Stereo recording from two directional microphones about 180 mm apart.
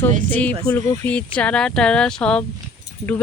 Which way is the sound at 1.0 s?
5° left (ahead or behind).